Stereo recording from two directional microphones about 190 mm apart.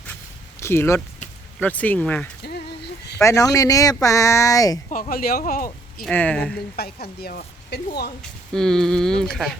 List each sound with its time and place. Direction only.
0.6 s speech: 15° left (ahead or behind)
4.9 s speech: 45° left (ahead or behind)
6.0 s speech: 5° left (ahead or behind)
6.7 s a woman's voice: 55° left (ahead or behind)
8.5 s speech: 5° left (ahead or behind)